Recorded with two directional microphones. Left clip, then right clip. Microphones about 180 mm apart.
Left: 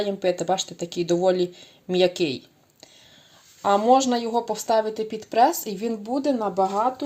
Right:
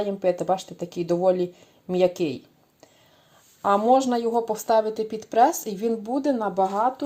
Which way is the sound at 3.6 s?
5° left (ahead or behind).